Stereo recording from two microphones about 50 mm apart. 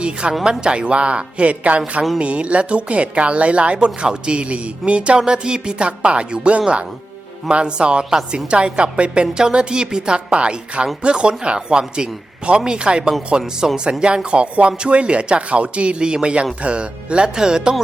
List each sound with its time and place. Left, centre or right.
0.0 s speech: right